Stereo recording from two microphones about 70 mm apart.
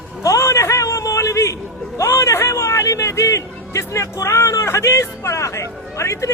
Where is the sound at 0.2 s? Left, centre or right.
Left.